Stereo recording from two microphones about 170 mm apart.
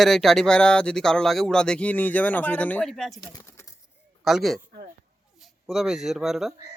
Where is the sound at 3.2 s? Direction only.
20° left (ahead or behind).